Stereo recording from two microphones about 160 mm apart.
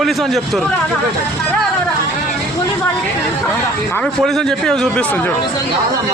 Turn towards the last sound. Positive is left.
turn(degrees=5)  # may be behind; listen again after turning